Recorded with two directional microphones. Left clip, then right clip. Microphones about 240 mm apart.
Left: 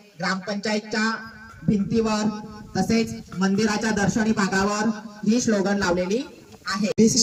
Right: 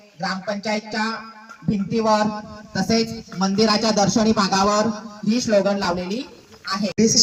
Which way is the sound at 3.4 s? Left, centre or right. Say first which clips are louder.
Right 5 dB; right.